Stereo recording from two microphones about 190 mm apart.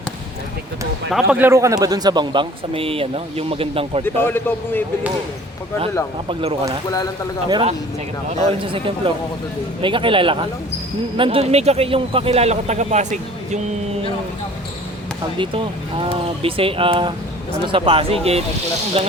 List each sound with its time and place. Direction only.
1.1 s speech: 5° right (ahead or behind); by 4.0 s 30° right (ahead or behind)
4.0 s a man's voice: 10° left (ahead or behind)
6.2 s speech: 30° right (ahead or behind)
15.4 s speech: 30° right (ahead or behind)